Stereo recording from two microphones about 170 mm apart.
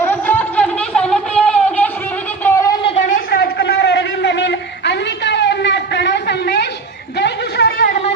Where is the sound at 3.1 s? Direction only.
65° left (ahead or behind).